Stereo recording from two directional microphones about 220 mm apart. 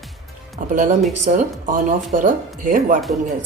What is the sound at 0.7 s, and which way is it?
Speech, 35° right (ahead or behind).